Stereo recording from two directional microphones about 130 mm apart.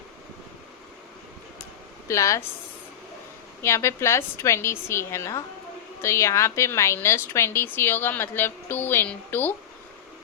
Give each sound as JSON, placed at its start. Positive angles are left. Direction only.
{"t": 2.0, "sound": "a woman's voice", "side_deg": 25}
{"t": 3.6, "sound": "a woman's voice", "side_deg": 20}